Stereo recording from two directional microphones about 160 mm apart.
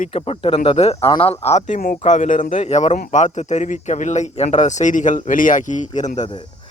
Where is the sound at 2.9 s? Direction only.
55° left (ahead or behind).